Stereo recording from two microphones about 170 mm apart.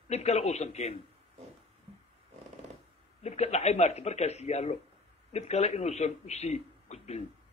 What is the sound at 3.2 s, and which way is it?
A man's voice, 40° left (ahead or behind).